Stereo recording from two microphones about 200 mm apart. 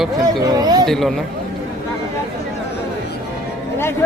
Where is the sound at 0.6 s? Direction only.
20° right (ahead or behind).